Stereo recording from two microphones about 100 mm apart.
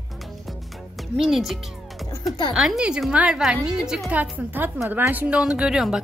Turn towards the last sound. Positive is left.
turn(degrees=-5)  # may be behind; listen again after turning